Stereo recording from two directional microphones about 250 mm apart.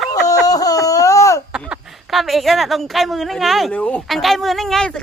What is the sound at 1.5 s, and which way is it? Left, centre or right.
Speech, centre.